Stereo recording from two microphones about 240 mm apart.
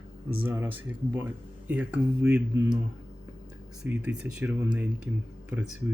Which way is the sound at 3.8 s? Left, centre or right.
Centre.